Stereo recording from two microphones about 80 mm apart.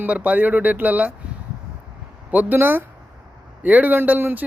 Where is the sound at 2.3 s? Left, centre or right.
Right.